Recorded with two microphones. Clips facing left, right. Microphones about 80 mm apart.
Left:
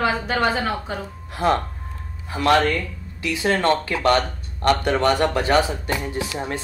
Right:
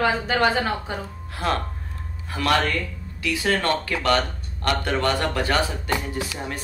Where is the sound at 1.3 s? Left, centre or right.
Left.